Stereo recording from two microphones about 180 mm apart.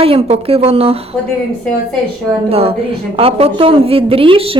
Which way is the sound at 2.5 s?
35° right (ahead or behind).